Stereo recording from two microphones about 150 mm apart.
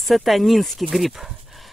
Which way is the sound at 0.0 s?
Centre (ahead or behind).